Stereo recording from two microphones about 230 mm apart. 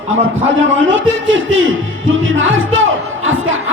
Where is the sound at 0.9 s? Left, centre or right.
Right.